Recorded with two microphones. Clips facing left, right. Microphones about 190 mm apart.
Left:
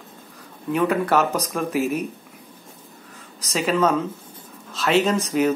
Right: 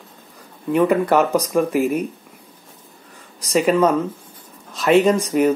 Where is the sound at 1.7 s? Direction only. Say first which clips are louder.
Right 4 dB; 55° right (ahead or behind).